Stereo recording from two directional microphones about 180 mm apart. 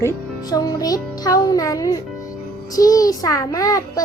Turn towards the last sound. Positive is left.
turn(degrees=20)  # may be behind; listen again after turning